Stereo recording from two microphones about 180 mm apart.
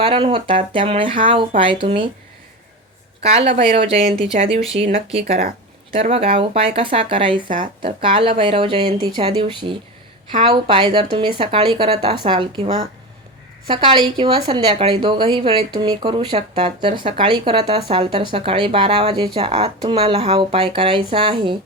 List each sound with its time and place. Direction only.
0.1 s speech: 35° right (ahead or behind)
3.2 s speech: 35° right (ahead or behind)
5.2 s speech: 55° right (ahead or behind)
5.9 s speech: 30° right (ahead or behind)
7.4 s speech: 45° right (ahead or behind)
7.8 s speech: 30° right (ahead or behind)
13.8 s speech: 30° right (ahead or behind)